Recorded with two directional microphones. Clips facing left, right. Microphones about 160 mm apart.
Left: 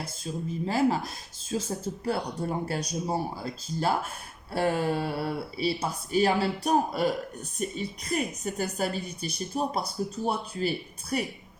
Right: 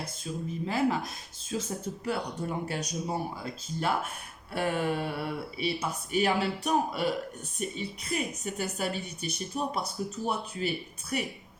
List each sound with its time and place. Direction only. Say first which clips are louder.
0.6 s a woman's voice: left 3 dB; 30° left (ahead or behind)